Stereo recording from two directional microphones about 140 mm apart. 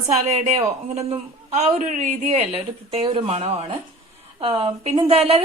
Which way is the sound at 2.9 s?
35° right (ahead or behind).